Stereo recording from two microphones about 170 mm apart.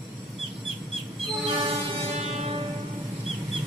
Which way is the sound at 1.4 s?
35° right (ahead or behind).